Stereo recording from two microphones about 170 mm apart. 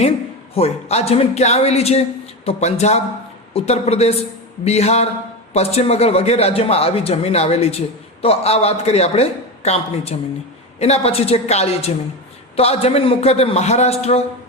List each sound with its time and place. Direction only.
0.5 s speech: 40° left (ahead or behind)